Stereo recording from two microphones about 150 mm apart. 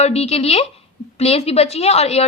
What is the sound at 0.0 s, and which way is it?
A woman's voice, 45° left (ahead or behind).